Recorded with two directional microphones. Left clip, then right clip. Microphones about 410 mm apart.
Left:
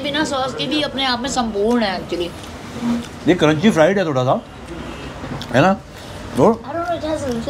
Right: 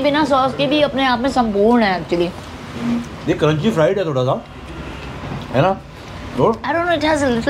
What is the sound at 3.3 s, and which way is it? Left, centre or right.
Speech, centre.